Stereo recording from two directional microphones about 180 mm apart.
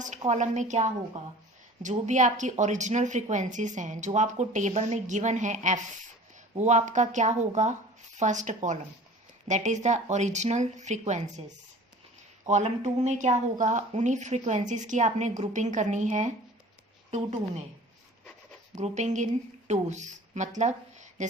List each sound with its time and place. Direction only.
0.3 s a woman's voice: 40° right (ahead or behind)
18.8 s a woman's voice: 40° right (ahead or behind)